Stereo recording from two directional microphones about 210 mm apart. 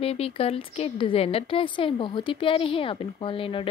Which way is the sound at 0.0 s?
30° left (ahead or behind).